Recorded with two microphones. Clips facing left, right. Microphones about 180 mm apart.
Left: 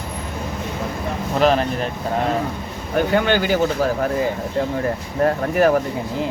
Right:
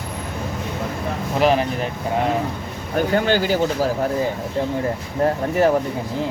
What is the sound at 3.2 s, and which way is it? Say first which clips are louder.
Speech: even; 35° right (ahead or behind).